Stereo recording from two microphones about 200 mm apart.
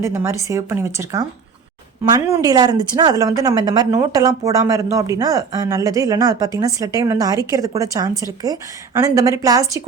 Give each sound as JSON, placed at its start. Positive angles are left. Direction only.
{"t": 0.0, "sound": "a woman's voice", "side_deg": -10}